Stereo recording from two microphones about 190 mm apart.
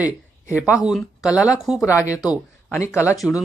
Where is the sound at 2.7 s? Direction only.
15° left (ahead or behind).